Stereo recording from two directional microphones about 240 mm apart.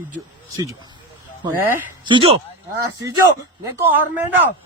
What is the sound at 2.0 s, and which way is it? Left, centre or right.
Speech, right.